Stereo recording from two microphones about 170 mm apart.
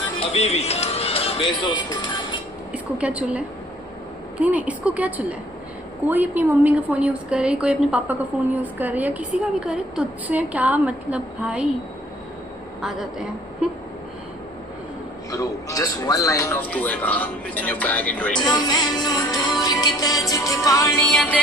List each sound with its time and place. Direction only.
0.3 s speech: 40° left (ahead or behind)
2.7 s a woman's voice: 10° right (ahead or behind)
12.8 s a woman's voice: 5° right (ahead or behind)
15.3 s a man's voice: 20° left (ahead or behind)
18.5 s music: 25° left (ahead or behind)
21.0 s a woman's voice: 5° left (ahead or behind)